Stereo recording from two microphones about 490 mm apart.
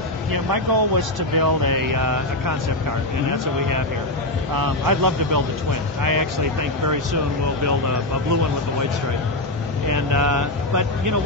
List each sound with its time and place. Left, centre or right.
0.3 s speech: right
4.6 s speech: right
9.8 s speech: right